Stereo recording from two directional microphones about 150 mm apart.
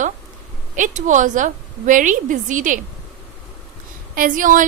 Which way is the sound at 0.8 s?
55° right (ahead or behind).